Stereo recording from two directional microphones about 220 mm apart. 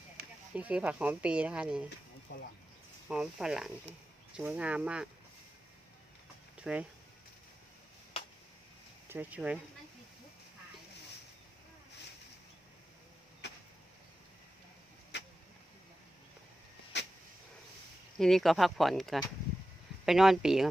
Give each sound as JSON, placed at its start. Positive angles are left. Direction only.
{"t": 0.5, "sound": "speech", "side_deg": -5}
{"t": 2.3, "sound": "speech", "side_deg": 50}
{"t": 3.1, "sound": "speech", "side_deg": -5}
{"t": 6.6, "sound": "speech", "side_deg": -5}
{"t": 9.0, "sound": "speech", "side_deg": -10}
{"t": 15.1, "sound": "a sound", "side_deg": 50}
{"t": 16.9, "sound": "a sound", "side_deg": 50}
{"t": 18.2, "sound": "speech", "side_deg": 0}